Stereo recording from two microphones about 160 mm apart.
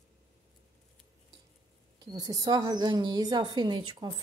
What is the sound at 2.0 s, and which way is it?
A woman's voice, 25° right (ahead or behind).